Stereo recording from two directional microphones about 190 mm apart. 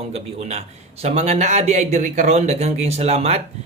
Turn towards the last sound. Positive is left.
turn(degrees=-35)  # may be behind; listen again after turning